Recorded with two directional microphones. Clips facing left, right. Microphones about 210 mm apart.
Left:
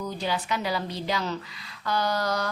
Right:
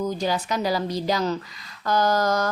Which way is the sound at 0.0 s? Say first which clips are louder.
Right 5 dB; 45° right (ahead or behind).